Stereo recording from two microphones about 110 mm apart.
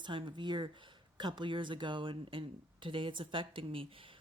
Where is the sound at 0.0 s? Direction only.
45° right (ahead or behind).